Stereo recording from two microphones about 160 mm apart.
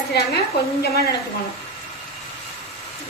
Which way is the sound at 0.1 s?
85° left.